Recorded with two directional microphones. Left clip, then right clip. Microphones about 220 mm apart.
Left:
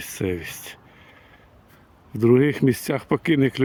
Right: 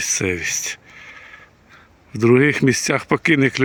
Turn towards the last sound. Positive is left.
turn(degrees=5)  # may be behind; listen again after turning